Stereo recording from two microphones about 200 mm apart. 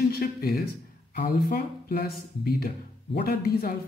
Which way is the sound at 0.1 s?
50° left (ahead or behind).